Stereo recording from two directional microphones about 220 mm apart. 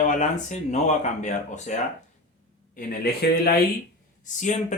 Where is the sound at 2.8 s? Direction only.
45° left (ahead or behind).